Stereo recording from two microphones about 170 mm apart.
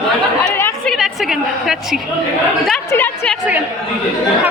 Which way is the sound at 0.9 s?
Centre (ahead or behind).